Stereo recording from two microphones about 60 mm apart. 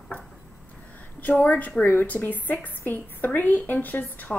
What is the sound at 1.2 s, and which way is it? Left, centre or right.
A woman's voice, left.